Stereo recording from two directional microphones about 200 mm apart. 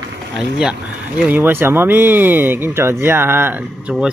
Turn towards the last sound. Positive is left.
turn(degrees=-5)  # may be behind; listen again after turning